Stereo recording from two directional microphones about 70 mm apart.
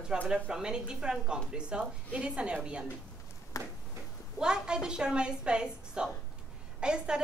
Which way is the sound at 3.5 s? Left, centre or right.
Left.